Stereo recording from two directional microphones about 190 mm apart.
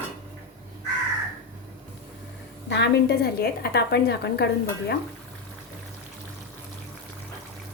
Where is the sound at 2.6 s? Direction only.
65° left (ahead or behind).